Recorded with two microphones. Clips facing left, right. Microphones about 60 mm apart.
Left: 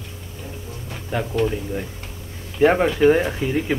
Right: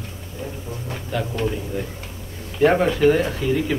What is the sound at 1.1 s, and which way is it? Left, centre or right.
Speech, left.